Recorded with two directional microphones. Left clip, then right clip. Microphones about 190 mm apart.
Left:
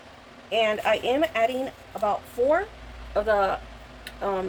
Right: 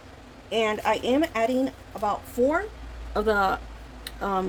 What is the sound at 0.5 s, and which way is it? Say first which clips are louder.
Speech: left 2 dB; 50° right (ahead or behind).